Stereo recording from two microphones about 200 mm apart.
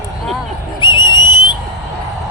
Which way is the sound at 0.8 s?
25° left (ahead or behind).